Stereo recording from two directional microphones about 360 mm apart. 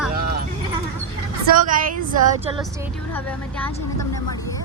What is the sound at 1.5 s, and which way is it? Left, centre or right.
Speech, right.